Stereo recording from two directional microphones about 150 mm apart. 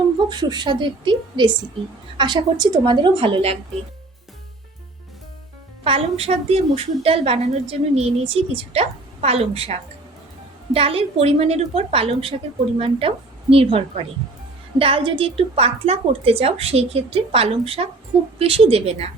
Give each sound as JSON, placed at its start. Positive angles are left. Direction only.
{"t": 0.3, "sound": "a woman's voice", "side_deg": -30}
{"t": 5.8, "sound": "a woman's voice", "side_deg": -40}